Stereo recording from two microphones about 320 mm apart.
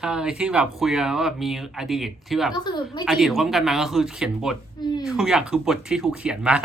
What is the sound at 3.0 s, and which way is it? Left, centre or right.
Speech, centre.